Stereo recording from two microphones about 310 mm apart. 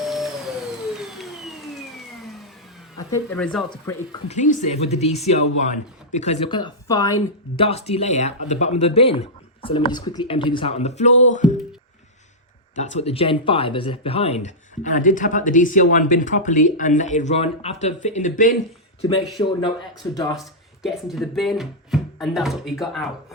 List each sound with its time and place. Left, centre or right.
0.0 s vacuum cleaner: centre
3.2 s speech: centre
3.7 s speech: centre
12.7 s speech: left
20.3 s speech: centre